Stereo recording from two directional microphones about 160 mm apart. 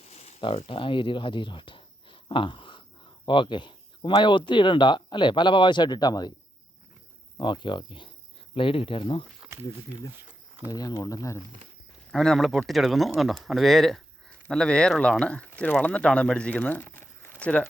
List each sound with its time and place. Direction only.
0.1 s a sound: 40° left (ahead or behind)
3.2 s speech: 30° left (ahead or behind)
7.3 s speech: 30° left (ahead or behind)
10.7 s speech: 25° left (ahead or behind)
12.1 s speech: 5° left (ahead or behind)